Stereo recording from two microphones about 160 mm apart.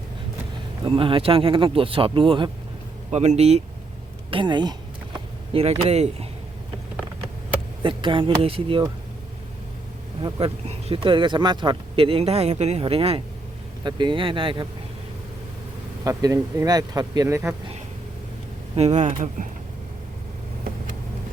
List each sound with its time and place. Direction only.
0.9 s speech: 35° right (ahead or behind)
3.1 s speech: 45° right (ahead or behind)
4.3 s speech: 30° right (ahead or behind)
7.8 s speech: 30° right (ahead or behind)
10.2 s speech: 30° right (ahead or behind)
16.0 s speech: 20° right (ahead or behind)
18.8 s speech: 45° right (ahead or behind)